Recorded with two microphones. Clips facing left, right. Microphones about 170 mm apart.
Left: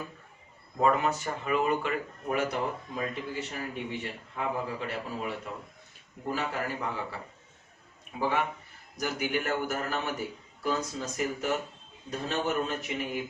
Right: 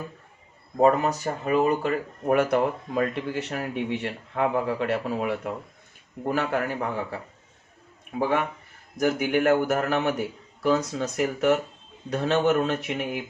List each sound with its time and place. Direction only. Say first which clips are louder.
0.8 s speech: right 6 dB; 40° right (ahead or behind)
2.3 s speech: right 8 dB; 60° right (ahead or behind)
9.0 s speech: right 8 dB; 55° right (ahead or behind); by 13.2 s 70° right (ahead or behind)